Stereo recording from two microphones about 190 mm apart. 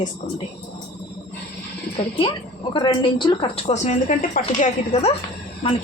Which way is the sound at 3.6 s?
40° left (ahead or behind).